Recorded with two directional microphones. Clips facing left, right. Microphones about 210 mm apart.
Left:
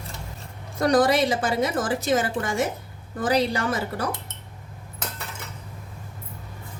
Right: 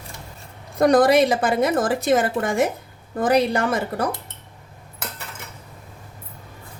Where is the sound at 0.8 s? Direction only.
55° right (ahead or behind).